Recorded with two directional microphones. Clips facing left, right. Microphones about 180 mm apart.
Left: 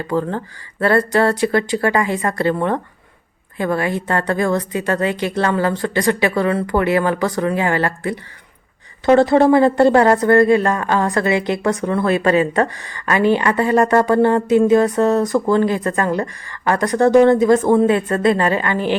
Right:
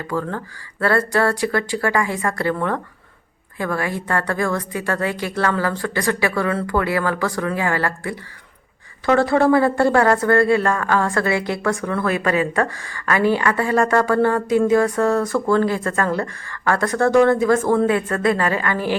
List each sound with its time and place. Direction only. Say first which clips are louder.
0.1 s a woman's voice: left 4 dB; 25° left (ahead or behind)